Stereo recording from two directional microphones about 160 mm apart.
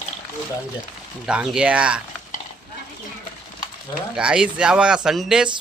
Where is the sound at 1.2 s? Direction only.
5° right (ahead or behind).